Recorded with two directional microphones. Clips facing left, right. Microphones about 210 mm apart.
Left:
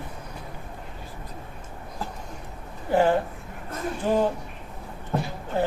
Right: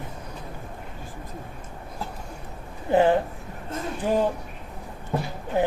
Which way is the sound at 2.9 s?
20° right (ahead or behind).